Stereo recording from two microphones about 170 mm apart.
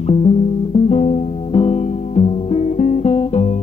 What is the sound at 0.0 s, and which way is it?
Music, 40° left (ahead or behind).